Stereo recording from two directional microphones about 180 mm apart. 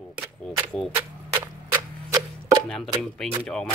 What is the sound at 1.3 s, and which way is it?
Tick-tock, 20° right (ahead or behind).